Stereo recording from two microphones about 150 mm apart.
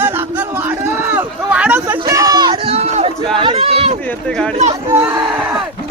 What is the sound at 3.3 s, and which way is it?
Run, 40° right (ahead or behind).